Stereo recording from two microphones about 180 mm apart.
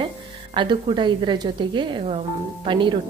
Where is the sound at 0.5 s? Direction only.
25° right (ahead or behind).